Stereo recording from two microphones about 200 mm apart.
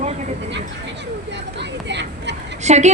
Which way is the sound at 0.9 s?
60° right (ahead or behind).